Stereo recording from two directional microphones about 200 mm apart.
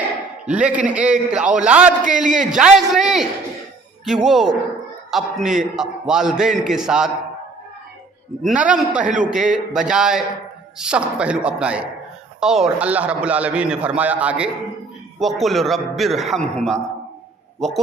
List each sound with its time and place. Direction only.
0.4 s a man's voice: 5° right (ahead or behind)
2.0 s a man's voice: 40° right (ahead or behind)
2.5 s a man's voice: 5° right (ahead or behind)
8.4 s a man's voice: 5° right (ahead or behind)
9.0 s a man's voice: 40° right (ahead or behind)
9.3 s a man's voice: centre (ahead or behind)